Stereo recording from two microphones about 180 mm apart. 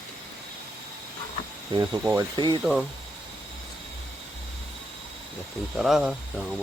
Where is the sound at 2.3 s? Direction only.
25° right (ahead or behind).